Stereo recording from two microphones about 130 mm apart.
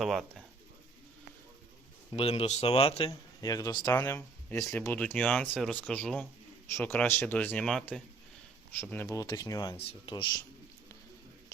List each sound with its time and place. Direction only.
0.0 s speech: centre (ahead or behind)
2.1 s speech: 50° left (ahead or behind)
3.1 s speech: 30° left (ahead or behind)
3.9 s speech: 15° left (ahead or behind)
8.8 s speech: 15° left (ahead or behind)
9.0 s speech: 30° left (ahead or behind)
9.7 s speech: 45° left (ahead or behind)